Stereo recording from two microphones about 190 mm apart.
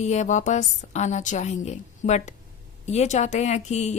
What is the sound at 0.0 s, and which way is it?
Speech, 35° left (ahead or behind).